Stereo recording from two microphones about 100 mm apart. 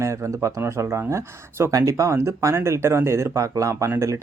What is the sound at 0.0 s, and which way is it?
Speech, 30° right (ahead or behind).